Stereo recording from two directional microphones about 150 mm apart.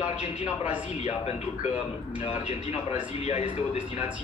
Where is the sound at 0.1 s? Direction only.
50° left (ahead or behind).